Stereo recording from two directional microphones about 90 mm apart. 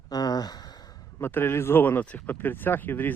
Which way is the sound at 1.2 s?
25° left (ahead or behind).